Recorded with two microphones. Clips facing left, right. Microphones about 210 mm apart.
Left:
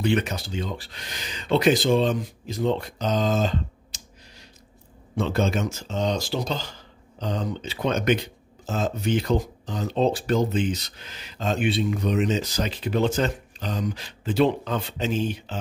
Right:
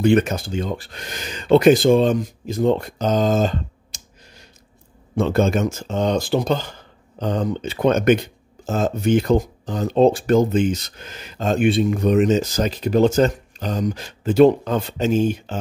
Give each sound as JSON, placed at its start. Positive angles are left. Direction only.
{"t": 0.0, "sound": "speech", "side_deg": -50}